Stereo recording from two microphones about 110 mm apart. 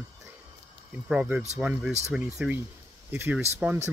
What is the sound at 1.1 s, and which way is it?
Speech, 10° right (ahead or behind).